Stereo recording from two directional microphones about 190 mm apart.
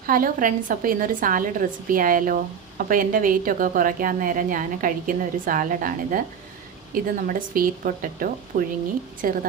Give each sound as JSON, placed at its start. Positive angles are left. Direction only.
{"t": 0.0, "sound": "a woman's voice", "side_deg": -50}